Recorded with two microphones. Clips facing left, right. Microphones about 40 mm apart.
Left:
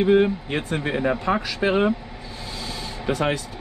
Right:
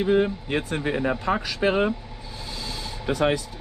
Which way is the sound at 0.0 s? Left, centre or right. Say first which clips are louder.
Left 4 dB; left.